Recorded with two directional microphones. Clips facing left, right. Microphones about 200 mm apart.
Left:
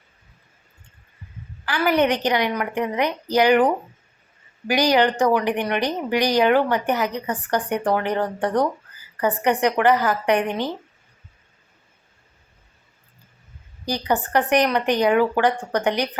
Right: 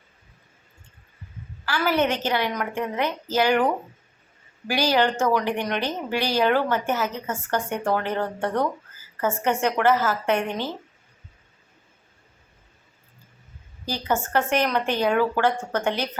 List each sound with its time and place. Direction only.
1.6 s a woman's voice: 15° left (ahead or behind)
4.7 s a woman's voice: 15° left (ahead or behind)
13.8 s a woman's voice: 15° left (ahead or behind)